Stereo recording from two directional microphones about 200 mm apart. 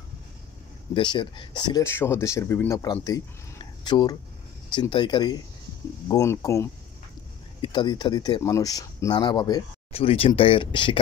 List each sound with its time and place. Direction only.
0.9 s speech: 25° left (ahead or behind)